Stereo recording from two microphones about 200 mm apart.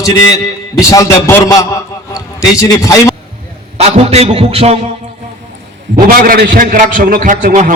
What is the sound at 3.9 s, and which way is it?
Music, 30° right (ahead or behind).